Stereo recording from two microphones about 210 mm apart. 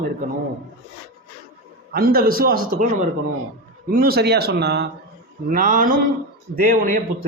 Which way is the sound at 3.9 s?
45° right (ahead or behind).